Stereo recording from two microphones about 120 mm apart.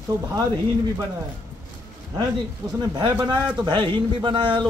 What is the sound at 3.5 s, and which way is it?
A man's voice, 35° right (ahead or behind).